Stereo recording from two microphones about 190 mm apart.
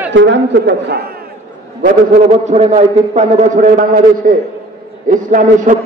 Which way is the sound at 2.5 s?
35° right (ahead or behind).